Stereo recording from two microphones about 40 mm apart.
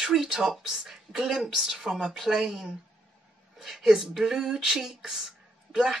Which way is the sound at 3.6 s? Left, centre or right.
Centre.